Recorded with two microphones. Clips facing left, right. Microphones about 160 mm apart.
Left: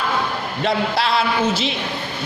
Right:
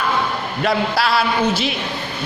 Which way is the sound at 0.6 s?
25° left (ahead or behind).